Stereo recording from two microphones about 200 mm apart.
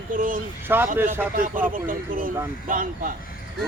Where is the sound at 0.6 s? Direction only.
10° right (ahead or behind).